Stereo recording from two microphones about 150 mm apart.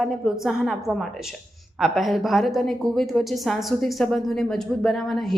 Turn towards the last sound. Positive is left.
turn(degrees=0)  # may be behind; listen again after turning